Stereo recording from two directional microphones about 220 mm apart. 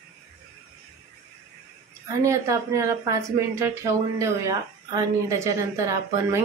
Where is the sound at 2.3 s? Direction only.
15° right (ahead or behind).